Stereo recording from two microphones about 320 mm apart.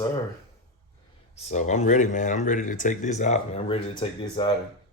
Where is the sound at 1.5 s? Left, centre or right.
Left.